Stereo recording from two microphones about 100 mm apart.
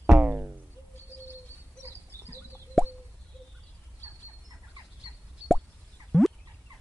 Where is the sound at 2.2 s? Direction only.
20° left (ahead or behind).